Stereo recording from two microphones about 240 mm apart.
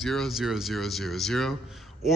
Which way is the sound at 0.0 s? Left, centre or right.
Centre.